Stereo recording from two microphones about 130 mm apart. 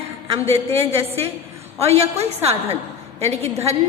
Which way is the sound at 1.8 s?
55° right (ahead or behind).